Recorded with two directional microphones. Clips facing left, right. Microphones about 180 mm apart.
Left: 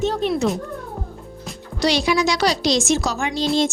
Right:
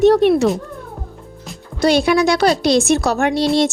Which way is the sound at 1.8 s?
55° right (ahead or behind).